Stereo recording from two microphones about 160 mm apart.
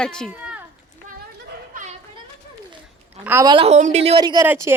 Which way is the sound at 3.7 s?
45° right (ahead or behind).